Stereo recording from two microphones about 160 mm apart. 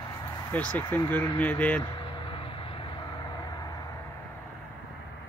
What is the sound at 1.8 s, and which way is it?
Vehicle, 30° left (ahead or behind).